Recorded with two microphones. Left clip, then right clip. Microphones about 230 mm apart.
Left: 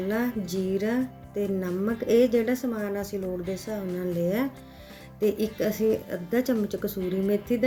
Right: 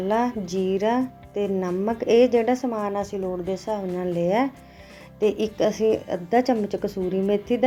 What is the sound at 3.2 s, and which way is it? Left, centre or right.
Speech, centre.